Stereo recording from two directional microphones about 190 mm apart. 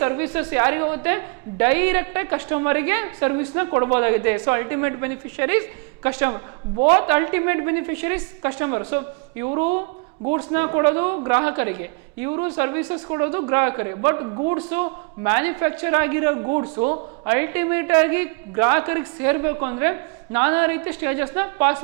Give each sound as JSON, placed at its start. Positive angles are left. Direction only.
{"t": 0.0, "sound": "a woman's voice", "side_deg": -15}